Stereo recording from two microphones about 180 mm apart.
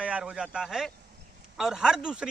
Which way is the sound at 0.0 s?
5° right (ahead or behind).